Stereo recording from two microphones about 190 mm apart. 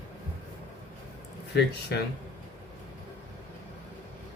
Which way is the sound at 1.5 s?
60° left (ahead or behind).